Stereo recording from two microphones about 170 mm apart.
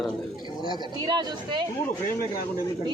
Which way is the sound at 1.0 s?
25° right (ahead or behind).